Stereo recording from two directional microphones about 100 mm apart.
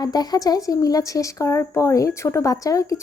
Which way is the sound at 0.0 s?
40° left (ahead or behind).